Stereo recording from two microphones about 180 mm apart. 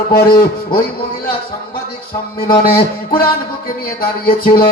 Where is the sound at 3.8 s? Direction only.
55° left (ahead or behind).